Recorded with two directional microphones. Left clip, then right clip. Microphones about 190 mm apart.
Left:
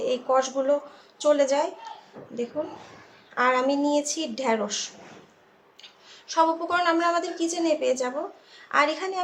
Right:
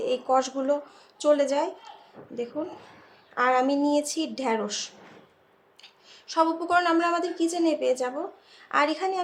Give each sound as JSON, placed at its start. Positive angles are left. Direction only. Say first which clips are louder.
{"t": 0.0, "sound": "a woman's voice", "louder": "left 1 dB", "side_deg": -35}
{"t": 3.3, "sound": "a woman's voice", "louder": "even", "side_deg": -35}